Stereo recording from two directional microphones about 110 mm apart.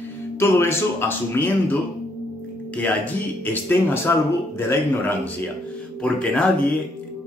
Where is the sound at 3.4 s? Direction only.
15° left (ahead or behind).